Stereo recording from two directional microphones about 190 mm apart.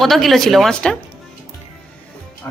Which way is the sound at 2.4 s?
15° left (ahead or behind).